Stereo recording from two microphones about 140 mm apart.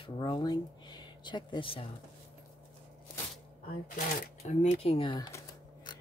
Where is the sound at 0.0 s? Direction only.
30° left (ahead or behind).